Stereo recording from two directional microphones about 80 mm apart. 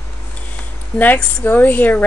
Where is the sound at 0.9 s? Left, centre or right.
Left.